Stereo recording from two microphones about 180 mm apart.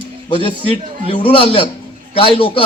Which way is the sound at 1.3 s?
30° left (ahead or behind).